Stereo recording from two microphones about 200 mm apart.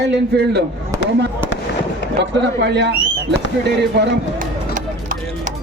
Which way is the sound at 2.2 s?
60° right (ahead or behind).